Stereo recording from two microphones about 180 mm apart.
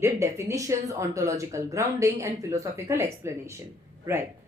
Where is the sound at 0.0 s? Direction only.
15° right (ahead or behind).